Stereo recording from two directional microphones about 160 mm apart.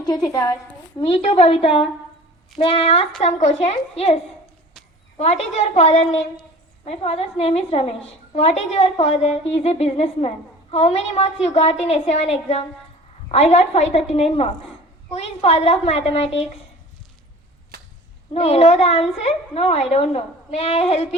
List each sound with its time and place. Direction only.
0.0 s a woman's voice: 25° left (ahead or behind)
0.9 s a woman's voice: 35° left (ahead or behind)
18.3 s a woman's voice: 40° left (ahead or behind)